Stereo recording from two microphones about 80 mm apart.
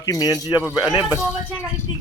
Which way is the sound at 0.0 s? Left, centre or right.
Left.